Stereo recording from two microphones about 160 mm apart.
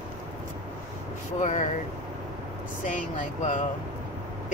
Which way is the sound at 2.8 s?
55° left (ahead or behind).